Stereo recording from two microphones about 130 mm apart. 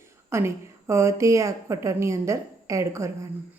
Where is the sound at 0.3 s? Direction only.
20° right (ahead or behind).